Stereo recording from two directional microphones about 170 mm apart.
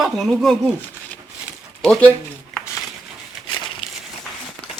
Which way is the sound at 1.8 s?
5° left (ahead or behind).